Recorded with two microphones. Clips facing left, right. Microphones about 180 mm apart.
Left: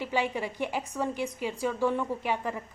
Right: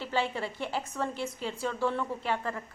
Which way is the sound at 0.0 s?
15° left (ahead or behind).